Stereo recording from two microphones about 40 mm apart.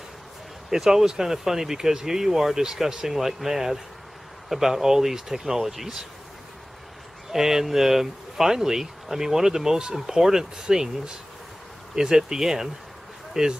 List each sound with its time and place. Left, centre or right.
0.7 s speech: centre
7.3 s speech: centre